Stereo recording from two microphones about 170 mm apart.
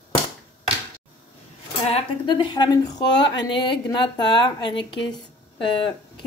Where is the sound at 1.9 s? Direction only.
30° left (ahead or behind).